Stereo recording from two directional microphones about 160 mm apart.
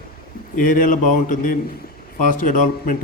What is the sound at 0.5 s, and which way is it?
A man's voice, 60° left (ahead or behind).